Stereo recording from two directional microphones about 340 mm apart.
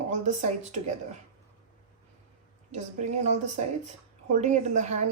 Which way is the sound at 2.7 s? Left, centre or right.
Right.